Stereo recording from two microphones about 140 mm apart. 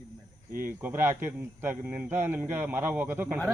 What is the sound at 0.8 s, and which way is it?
A man's voice, 15° right (ahead or behind).